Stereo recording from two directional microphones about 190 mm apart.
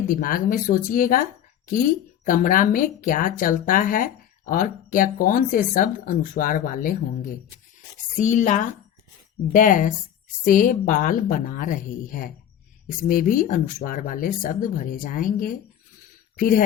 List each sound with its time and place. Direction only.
0.1 s speech: 50° left (ahead or behind)
2.2 s speech: 45° left (ahead or behind)